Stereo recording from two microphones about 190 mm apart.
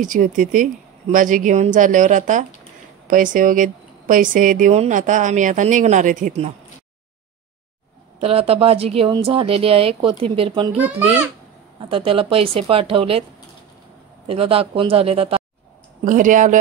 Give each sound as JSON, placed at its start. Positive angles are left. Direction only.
{"t": 0.0, "sound": "speech", "side_deg": -45}
{"t": 8.2, "sound": "speech", "side_deg": -30}
{"t": 10.8, "sound": "a child's voice", "side_deg": -10}
{"t": 11.9, "sound": "speech", "side_deg": -30}
{"t": 14.2, "sound": "speech", "side_deg": -30}
{"t": 16.0, "sound": "speech", "side_deg": -45}